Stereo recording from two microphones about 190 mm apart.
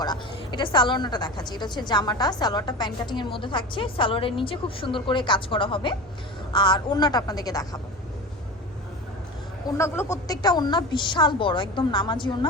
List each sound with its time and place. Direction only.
0.0 s a woman's voice: 25° left (ahead or behind)
9.6 s a woman's voice: 15° left (ahead or behind)